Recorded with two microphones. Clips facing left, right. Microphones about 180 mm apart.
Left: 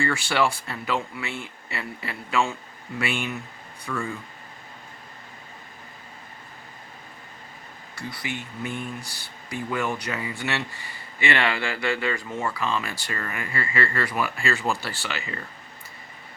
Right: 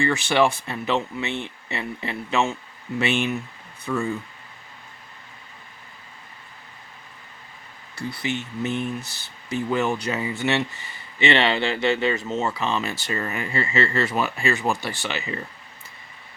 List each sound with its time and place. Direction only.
0.0 s speech: 20° right (ahead or behind)
7.9 s speech: 25° right (ahead or behind)